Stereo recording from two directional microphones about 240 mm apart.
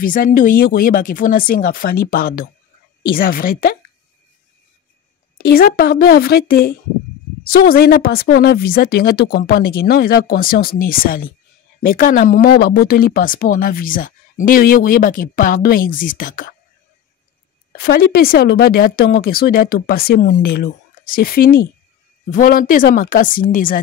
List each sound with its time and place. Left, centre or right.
0.0 s speech: left
5.4 s speech: left
17.7 s speech: left